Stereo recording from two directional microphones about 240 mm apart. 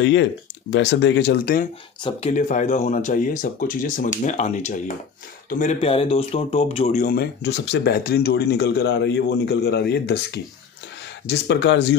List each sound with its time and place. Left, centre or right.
0.0 s speech: left
2.0 s speech: left